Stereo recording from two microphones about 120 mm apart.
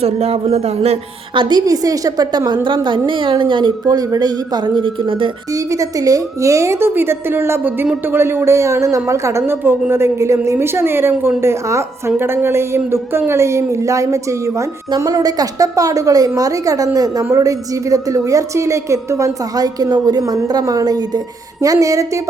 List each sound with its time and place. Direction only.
0.0 s speech: 60° right (ahead or behind)
1.3 s a woman's voice: 40° right (ahead or behind)
5.5 s a woman's voice: 30° right (ahead or behind)